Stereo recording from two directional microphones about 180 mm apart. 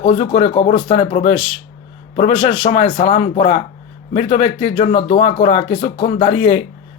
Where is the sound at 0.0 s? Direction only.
40° left (ahead or behind).